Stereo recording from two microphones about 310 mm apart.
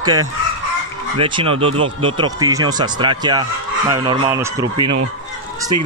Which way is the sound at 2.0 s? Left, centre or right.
Centre.